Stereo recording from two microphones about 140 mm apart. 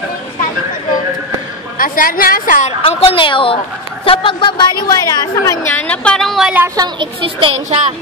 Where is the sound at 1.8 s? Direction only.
90° left; by 2.7 s 70° left (ahead or behind).